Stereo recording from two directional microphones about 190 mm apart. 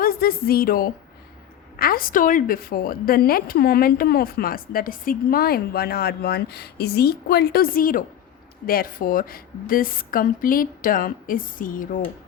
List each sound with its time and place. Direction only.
0.0 s a woman's voice: 50° left (ahead or behind)